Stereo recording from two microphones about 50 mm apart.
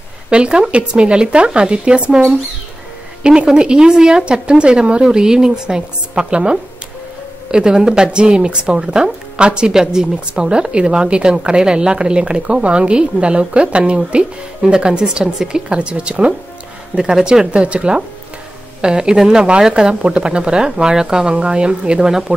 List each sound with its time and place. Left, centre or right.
0.3 s a woman's voice: right